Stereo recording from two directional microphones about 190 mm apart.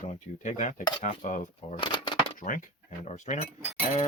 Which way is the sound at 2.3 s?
45° left (ahead or behind).